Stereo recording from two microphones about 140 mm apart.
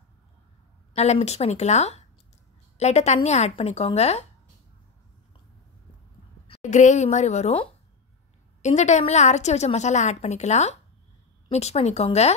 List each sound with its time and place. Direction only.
0.9 s a woman's voice: 50° left (ahead or behind)
6.6 s a woman's voice: 60° left (ahead or behind)
8.6 s a woman's voice: 55° left (ahead or behind)